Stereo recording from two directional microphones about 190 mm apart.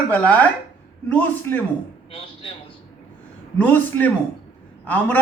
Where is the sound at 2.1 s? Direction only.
30° left (ahead or behind).